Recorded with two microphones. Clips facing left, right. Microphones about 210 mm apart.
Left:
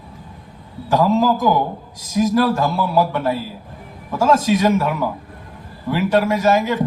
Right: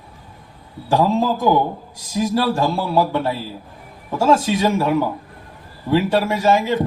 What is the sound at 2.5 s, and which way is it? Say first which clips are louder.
Speech: even; 30° right (ahead or behind).